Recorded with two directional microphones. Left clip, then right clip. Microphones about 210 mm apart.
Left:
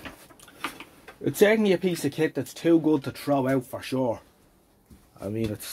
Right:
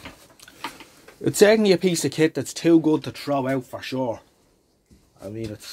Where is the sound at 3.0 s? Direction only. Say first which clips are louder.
Right 1 dB; 10° right (ahead or behind).